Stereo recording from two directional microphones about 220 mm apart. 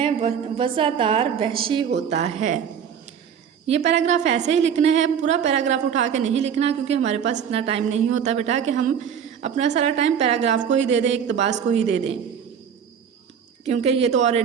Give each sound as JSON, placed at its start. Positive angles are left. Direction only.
{"t": 0.0, "sound": "a woman's voice", "side_deg": -25}
{"t": 3.9, "sound": "a woman's voice", "side_deg": -30}
{"t": 13.7, "sound": "a woman's voice", "side_deg": -30}